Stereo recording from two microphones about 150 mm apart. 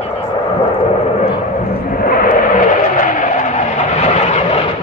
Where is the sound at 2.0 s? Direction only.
70° left (ahead or behind).